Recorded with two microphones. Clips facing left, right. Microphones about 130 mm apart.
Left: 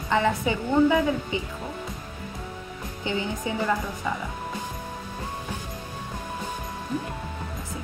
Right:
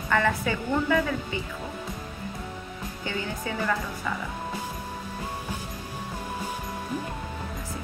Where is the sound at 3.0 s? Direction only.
20° left (ahead or behind).